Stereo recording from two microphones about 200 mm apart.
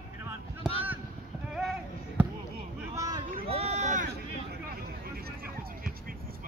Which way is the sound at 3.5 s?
30° right (ahead or behind).